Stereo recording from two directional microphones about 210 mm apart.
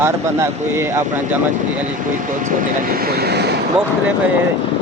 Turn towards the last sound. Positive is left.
turn(degrees=-50)  # may be behind; listen again after turning